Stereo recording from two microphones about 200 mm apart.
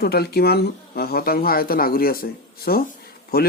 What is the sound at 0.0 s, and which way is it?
Speech, 50° left (ahead or behind).